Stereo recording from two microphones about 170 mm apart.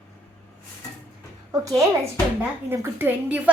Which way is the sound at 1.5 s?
20° right (ahead or behind).